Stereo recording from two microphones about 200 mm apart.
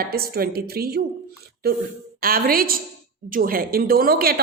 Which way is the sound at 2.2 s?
45° right (ahead or behind).